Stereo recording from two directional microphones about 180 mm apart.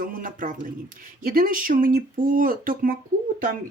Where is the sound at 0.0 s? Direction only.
50° right (ahead or behind).